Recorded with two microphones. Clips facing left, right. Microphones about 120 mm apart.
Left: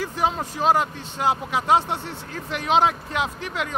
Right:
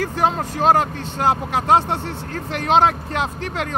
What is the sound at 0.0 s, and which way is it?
Speech, 55° right (ahead or behind).